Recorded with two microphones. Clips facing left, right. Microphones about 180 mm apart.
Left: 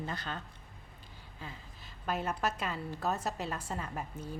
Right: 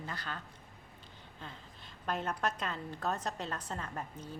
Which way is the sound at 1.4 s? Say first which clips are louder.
Left 2 dB; 5° left (ahead or behind).